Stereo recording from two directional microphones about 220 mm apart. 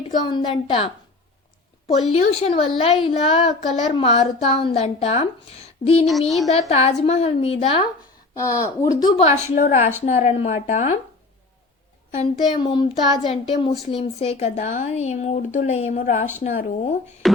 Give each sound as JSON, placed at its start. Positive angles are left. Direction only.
{"t": 0.1, "sound": "a woman's voice", "side_deg": 20}
{"t": 2.1, "sound": "a woman's voice", "side_deg": 30}
{"t": 6.1, "sound": "speech", "side_deg": 0}
{"t": 6.5, "sound": "a woman's voice", "side_deg": 30}
{"t": 8.4, "sound": "speech", "side_deg": 15}
{"t": 9.0, "sound": "speech", "side_deg": 30}
{"t": 12.1, "sound": "a woman's voice", "side_deg": 25}
{"t": 17.2, "sound": "beatboxing", "side_deg": 0}